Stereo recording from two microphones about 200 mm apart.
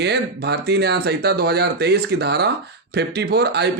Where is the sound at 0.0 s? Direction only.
55° right (ahead or behind).